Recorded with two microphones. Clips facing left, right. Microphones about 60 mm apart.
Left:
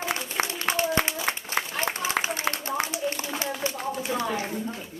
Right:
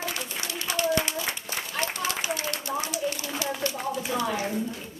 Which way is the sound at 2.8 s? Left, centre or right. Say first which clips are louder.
Left 1 dB; left.